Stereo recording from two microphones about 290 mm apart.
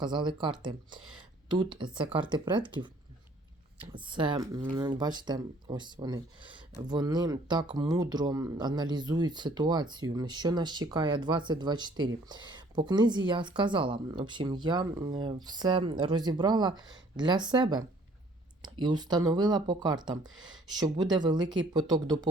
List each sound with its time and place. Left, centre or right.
0.0 s speech: centre